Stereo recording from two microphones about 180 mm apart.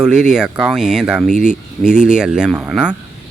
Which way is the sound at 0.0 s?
5° right (ahead or behind).